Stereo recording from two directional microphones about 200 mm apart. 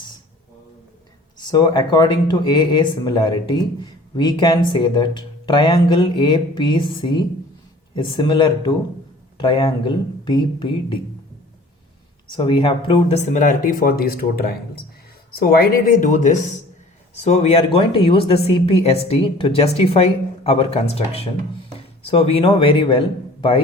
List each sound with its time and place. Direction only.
1.4 s speech: 20° left (ahead or behind)
12.3 s speech: 25° left (ahead or behind)